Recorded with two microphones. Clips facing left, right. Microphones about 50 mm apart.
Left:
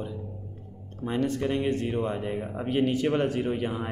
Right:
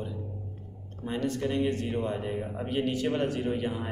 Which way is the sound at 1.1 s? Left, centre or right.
Left.